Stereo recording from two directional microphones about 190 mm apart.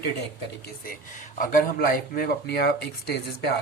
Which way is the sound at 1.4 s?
45° left (ahead or behind).